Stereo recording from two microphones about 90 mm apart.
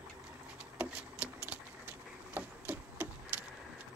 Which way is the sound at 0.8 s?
15° right (ahead or behind).